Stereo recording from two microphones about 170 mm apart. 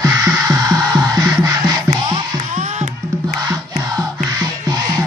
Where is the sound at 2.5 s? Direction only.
45° right (ahead or behind).